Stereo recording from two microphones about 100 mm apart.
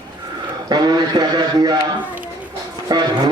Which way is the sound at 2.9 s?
45° right (ahead or behind).